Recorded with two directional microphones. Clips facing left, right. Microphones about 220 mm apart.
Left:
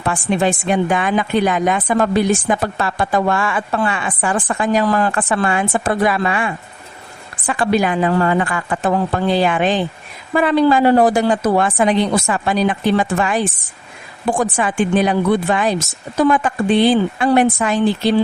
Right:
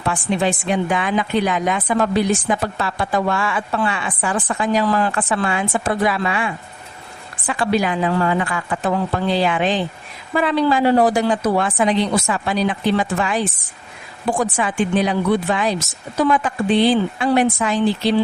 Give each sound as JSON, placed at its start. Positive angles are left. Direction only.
{"t": 0.0, "sound": "a woman's voice", "side_deg": 50}